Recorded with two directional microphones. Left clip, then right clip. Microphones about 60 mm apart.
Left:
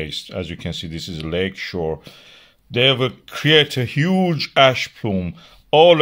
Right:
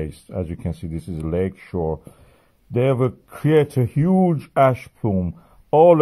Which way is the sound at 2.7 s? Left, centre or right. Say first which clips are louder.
Left 3 dB; centre.